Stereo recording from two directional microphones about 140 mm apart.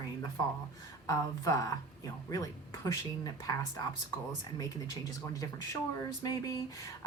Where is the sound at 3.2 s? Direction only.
25° left (ahead or behind).